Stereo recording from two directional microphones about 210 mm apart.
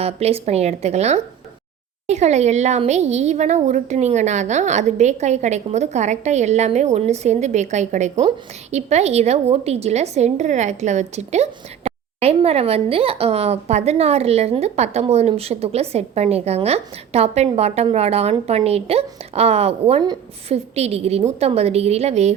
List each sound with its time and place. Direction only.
0.0 s a woman's voice: 30° right (ahead or behind)